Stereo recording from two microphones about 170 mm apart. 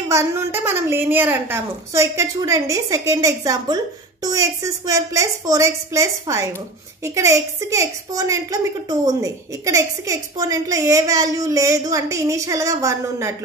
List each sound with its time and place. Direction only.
0.1 s a woman's voice: 15° right (ahead or behind)